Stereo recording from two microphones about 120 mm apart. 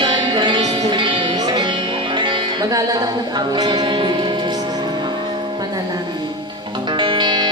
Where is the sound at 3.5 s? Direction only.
40° right (ahead or behind).